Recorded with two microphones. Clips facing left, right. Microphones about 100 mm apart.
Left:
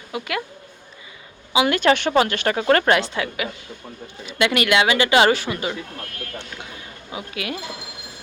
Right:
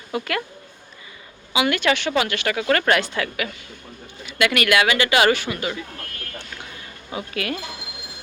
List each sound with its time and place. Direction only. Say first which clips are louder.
0.1 s speech: right 1 dB; 10° left (ahead or behind)
1.5 s a woman's voice: left 3 dB; 30° left (ahead or behind)
7.1 s speech: right 2 dB; 10° left (ahead or behind)